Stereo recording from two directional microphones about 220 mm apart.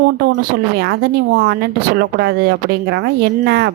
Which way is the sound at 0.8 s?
45° right (ahead or behind).